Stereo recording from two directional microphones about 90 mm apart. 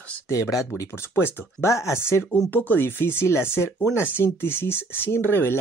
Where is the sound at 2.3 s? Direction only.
20° left (ahead or behind).